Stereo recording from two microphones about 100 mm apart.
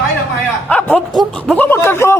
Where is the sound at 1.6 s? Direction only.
25° left (ahead or behind).